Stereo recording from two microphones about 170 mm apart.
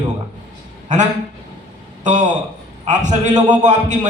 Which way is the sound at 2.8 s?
45° right (ahead or behind).